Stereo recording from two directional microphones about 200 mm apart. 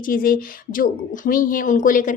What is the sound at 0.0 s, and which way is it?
Speech, 45° left (ahead or behind).